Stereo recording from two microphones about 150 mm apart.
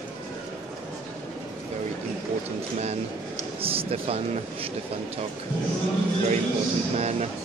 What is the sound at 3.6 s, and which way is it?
Speech, 40° right (ahead or behind).